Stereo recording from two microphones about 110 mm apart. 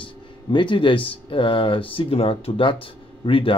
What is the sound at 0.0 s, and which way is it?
Speech, 50° left (ahead or behind).